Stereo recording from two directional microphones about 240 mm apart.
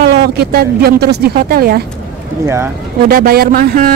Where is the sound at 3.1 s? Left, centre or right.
Right.